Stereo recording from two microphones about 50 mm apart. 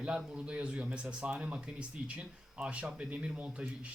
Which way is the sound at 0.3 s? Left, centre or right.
Right.